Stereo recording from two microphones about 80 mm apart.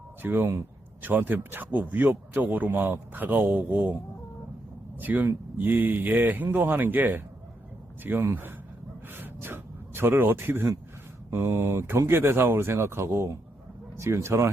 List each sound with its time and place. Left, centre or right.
0.2 s a man's voice: right
4.9 s a man's voice: right
9.1 s a sound: right
11.3 s speech: right